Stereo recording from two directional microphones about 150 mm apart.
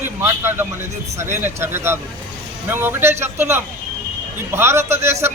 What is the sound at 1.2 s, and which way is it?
A man's voice, 15° right (ahead or behind).